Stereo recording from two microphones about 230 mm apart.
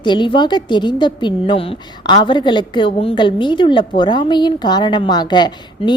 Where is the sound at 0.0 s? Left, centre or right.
Centre.